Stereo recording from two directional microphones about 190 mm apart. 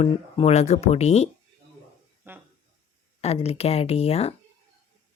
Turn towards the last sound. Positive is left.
turn(degrees=30)  # may be behind; listen again after turning